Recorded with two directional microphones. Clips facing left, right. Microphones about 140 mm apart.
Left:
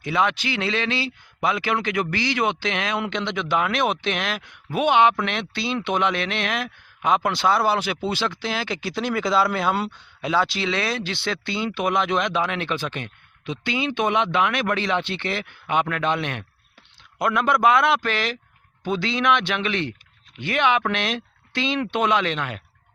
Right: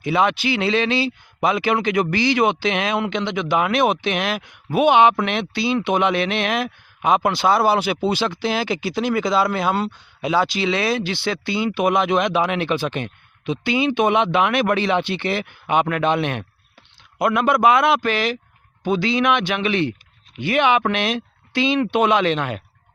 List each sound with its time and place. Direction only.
0.0 s a man's voice: 15° right (ahead or behind)
7.2 s a man's voice: 5° right (ahead or behind)
7.4 s speech: 15° right (ahead or behind)
17.2 s a man's voice: 5° right (ahead or behind); by 22.6 s 25° right (ahead or behind)